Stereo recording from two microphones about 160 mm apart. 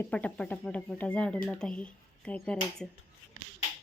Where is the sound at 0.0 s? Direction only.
10° left (ahead or behind).